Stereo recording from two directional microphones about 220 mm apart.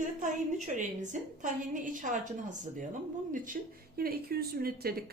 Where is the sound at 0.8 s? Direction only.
35° right (ahead or behind).